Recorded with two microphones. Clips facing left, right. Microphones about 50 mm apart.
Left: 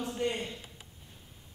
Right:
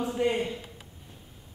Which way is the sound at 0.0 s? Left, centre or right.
Centre.